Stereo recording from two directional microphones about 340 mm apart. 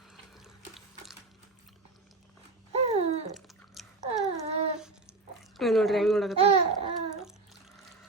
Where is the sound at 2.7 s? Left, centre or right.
Centre.